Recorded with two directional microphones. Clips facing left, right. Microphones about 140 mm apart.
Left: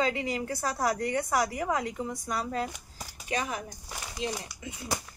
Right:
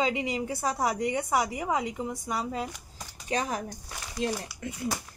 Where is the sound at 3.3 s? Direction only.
30° right (ahead or behind).